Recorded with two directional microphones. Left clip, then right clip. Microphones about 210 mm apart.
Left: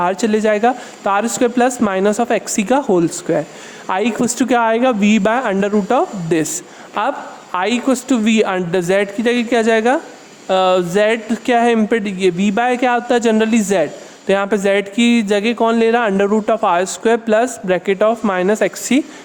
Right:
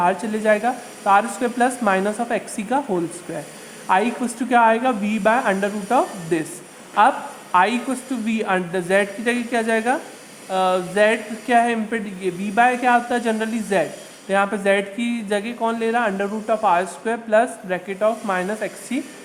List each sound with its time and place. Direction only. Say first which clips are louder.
0.0 s a woman's voice: left 4 dB; 50° left (ahead or behind)